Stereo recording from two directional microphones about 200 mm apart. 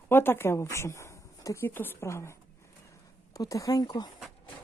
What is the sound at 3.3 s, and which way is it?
Speech, 15° left (ahead or behind).